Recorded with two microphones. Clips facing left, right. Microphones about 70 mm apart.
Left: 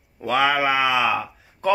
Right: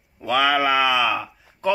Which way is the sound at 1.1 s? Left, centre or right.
Left.